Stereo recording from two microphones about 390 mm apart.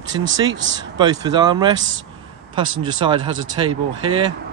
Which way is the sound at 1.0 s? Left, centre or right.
Centre.